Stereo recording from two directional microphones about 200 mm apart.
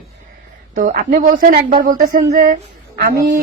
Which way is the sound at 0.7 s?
40° right (ahead or behind).